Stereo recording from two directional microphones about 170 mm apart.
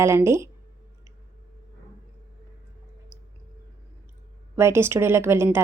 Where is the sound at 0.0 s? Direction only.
15° right (ahead or behind).